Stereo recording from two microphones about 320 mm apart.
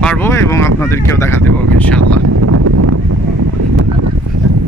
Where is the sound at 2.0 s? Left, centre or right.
Right.